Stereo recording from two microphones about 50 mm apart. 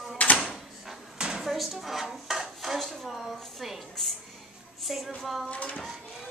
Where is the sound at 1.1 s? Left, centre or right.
Centre.